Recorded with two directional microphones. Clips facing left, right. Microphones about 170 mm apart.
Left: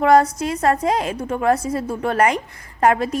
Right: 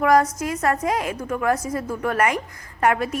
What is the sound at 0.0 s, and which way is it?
A woman's voice, 30° left (ahead or behind).